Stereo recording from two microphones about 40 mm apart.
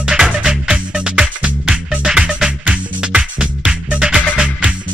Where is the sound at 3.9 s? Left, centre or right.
Right.